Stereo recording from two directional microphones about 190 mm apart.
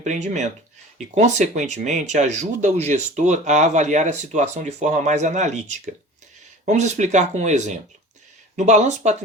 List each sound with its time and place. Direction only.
0.0 s speech: 40° right (ahead or behind)